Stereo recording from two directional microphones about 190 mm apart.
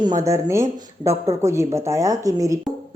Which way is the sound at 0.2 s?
15° right (ahead or behind).